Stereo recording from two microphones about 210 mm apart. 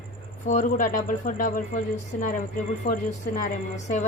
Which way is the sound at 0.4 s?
40° left (ahead or behind).